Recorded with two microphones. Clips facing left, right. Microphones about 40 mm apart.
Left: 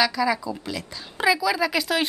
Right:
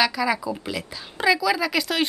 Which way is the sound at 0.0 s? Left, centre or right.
Centre.